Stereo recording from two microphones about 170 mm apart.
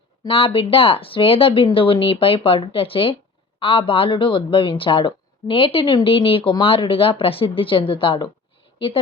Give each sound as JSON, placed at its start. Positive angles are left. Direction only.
{"t": 0.3, "sound": "speech", "side_deg": 35}